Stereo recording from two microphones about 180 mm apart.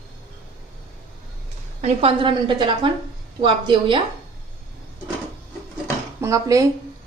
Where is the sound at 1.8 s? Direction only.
30° right (ahead or behind).